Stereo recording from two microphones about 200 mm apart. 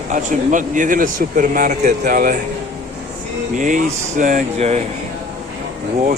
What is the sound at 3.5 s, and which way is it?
Speech, 40° right (ahead or behind).